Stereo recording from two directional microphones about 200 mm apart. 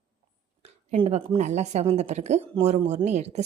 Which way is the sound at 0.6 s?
30° right (ahead or behind).